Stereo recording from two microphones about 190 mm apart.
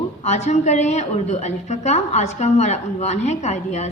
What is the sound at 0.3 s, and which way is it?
A woman's voice, 35° left (ahead or behind).